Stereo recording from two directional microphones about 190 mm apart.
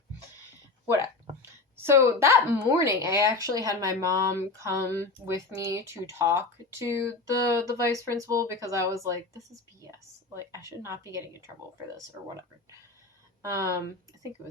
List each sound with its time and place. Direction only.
0.9 s a woman's voice: 15° right (ahead or behind)
10.3 s a woman's voice: 15° right (ahead or behind)
13.4 s speech: 15° right (ahead or behind)